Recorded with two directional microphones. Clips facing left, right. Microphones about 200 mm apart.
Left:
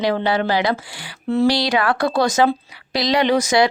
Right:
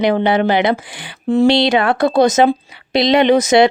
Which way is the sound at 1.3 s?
15° right (ahead or behind).